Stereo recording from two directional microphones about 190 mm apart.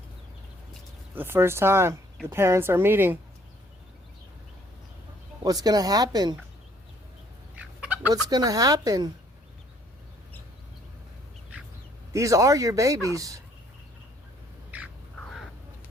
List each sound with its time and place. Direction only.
1.1 s speech: 10° right (ahead or behind)
5.4 s speech: 20° right (ahead or behind)
7.5 s fowl: 5° right (ahead or behind)
8.1 s speech: 20° right (ahead or behind)
12.1 s speech: 15° right (ahead or behind)
14.7 s bird: 10° right (ahead or behind)